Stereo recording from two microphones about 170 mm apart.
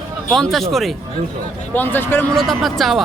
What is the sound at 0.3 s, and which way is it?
Speech, centre (ahead or behind).